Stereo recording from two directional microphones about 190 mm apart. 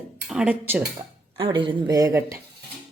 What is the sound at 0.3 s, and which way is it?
Speech, 5° right (ahead or behind).